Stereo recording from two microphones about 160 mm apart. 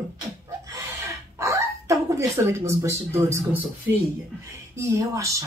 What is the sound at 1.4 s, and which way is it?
Speech, 20° right (ahead or behind).